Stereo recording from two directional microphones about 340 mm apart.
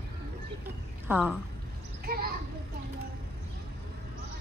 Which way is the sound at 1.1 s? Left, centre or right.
Centre.